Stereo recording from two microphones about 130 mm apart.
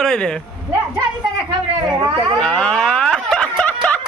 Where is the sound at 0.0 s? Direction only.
5° left (ahead or behind).